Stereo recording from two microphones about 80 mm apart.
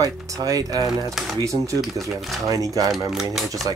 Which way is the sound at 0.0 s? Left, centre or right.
Right.